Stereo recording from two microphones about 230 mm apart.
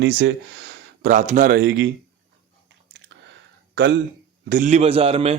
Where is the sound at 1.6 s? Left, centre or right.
Right.